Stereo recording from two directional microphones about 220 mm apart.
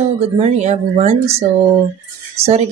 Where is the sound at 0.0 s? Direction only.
30° right (ahead or behind).